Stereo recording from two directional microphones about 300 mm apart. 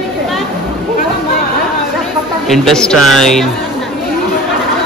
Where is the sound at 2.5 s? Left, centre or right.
Centre.